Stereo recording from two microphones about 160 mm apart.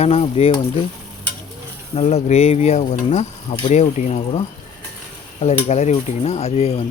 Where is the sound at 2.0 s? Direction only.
40° left (ahead or behind).